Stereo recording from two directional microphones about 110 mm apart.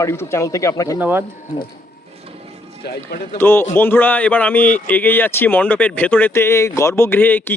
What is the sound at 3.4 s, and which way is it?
Speech, 20° left (ahead or behind).